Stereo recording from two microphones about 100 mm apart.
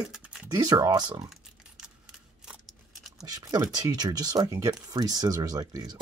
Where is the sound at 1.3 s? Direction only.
5° right (ahead or behind).